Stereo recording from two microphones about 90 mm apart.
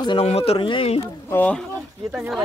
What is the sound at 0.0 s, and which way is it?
Speech, 75° left (ahead or behind).